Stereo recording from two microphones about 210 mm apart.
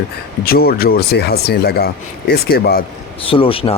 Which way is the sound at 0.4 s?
45° left (ahead or behind).